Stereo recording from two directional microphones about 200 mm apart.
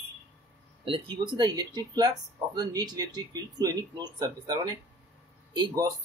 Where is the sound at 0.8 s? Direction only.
25° right (ahead or behind).